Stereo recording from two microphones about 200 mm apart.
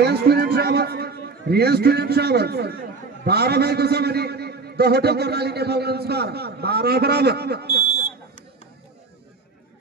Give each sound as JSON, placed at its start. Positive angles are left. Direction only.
{"t": 0.0, "sound": "a man's voice", "side_deg": -55}